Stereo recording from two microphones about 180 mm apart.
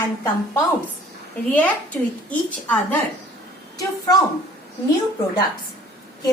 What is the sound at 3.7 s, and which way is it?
Speech, 20° left (ahead or behind).